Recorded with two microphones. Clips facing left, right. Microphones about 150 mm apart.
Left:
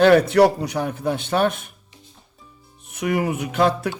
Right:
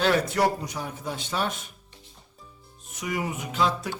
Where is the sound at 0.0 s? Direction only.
60° left (ahead or behind).